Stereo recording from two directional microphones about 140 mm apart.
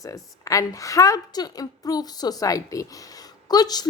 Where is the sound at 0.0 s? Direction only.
25° left (ahead or behind).